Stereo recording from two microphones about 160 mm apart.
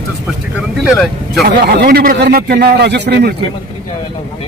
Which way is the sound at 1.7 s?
80° right.